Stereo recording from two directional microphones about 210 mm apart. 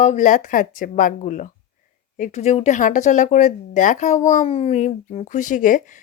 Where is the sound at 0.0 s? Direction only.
35° left (ahead or behind).